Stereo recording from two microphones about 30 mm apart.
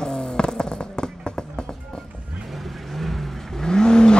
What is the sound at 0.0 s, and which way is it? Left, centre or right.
Fireworks, left.